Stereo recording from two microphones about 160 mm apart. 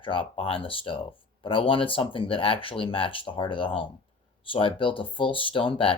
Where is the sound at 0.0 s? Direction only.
35° left (ahead or behind).